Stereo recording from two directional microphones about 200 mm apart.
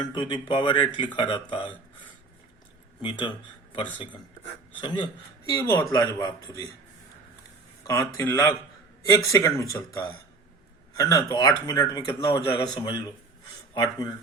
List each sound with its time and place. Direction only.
0.0 s speech: 25° left (ahead or behind)
7.9 s speech: 15° left (ahead or behind)